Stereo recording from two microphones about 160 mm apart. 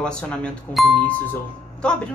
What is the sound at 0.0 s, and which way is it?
A woman's voice, 5° left (ahead or behind).